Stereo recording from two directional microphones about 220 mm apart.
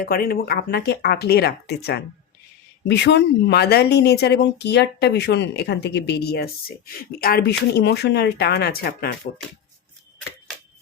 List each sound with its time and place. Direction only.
0.0 s speech: 40° left (ahead or behind)